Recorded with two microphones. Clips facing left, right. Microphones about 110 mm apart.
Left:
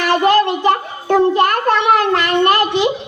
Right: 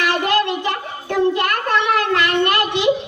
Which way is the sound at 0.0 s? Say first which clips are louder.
Left 5 dB; 40° left (ahead or behind).